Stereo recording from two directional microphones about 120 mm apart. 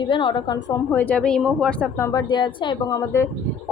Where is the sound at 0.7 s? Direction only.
15° left (ahead or behind); by 1.9 s centre (ahead or behind).